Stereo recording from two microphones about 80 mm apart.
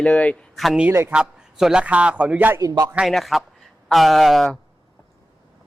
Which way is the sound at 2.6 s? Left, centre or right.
Right.